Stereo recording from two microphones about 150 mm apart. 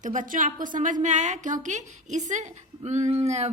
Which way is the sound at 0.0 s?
55° right (ahead or behind).